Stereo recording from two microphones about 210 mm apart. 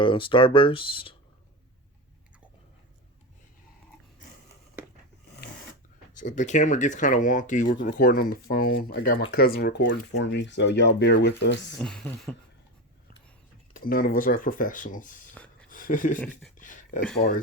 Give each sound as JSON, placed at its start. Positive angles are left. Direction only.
{"t": 0.0, "sound": "speech", "side_deg": 25}
{"t": 6.1, "sound": "speech", "side_deg": 35}
{"t": 11.8, "sound": "speech", "side_deg": 5}
{"t": 13.7, "sound": "speech", "side_deg": 45}
{"t": 16.6, "sound": "a sound", "side_deg": 40}
{"t": 17.2, "sound": "speech", "side_deg": 35}